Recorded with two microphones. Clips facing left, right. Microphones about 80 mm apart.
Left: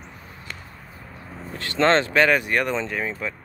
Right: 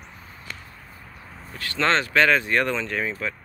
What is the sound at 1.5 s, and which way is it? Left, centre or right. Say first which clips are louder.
Speech: left 4 dB; left.